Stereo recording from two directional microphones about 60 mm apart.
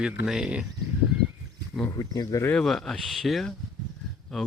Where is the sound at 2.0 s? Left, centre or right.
Left.